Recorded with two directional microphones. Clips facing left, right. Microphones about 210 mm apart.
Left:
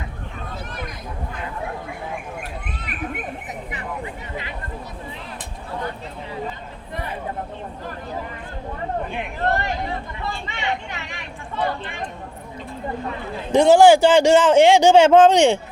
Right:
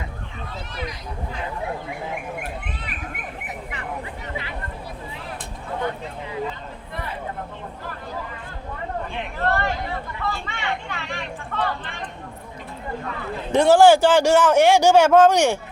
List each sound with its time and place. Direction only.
0.7 s a sound: 50° left (ahead or behind)
9.1 s speech: 20° left (ahead or behind)
13.5 s speech: 15° left (ahead or behind)